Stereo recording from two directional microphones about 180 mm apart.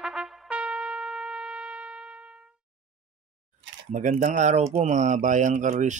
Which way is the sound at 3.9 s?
40° right (ahead or behind).